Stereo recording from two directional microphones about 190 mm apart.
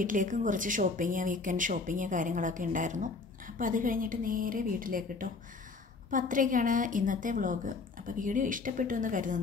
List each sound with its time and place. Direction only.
0.0 s a woman's voice: 45° right (ahead or behind)